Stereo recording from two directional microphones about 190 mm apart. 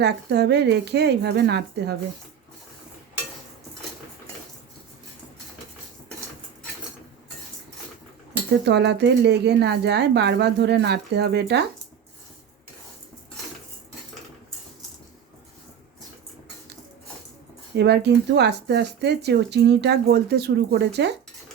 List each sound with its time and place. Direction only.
0.0 s speech: 60° right (ahead or behind)
8.6 s speech: 60° right (ahead or behind)
17.7 s speech: 60° right (ahead or behind)